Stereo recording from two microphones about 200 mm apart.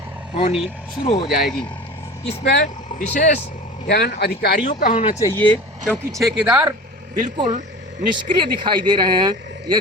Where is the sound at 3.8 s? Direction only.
55° left (ahead or behind).